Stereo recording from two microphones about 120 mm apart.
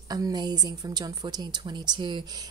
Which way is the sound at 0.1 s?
35° right (ahead or behind).